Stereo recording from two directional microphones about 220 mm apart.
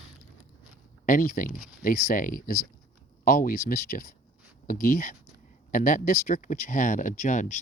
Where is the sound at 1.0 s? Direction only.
35° left (ahead or behind).